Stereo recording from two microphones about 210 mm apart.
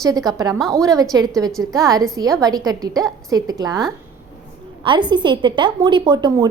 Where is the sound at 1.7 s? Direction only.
15° right (ahead or behind).